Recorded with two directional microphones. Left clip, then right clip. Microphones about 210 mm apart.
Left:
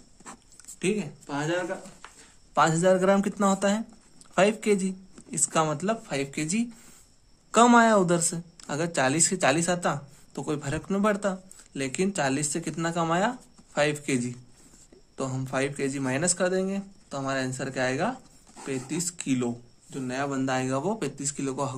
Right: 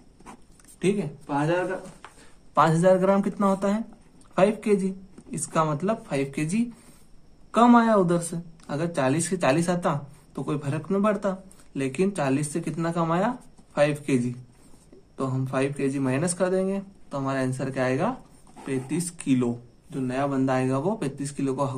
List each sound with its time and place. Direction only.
0.2 s zipper: 20° left (ahead or behind)
2.5 s speech: 15° left (ahead or behind)
7.5 s speech: 35° left (ahead or behind)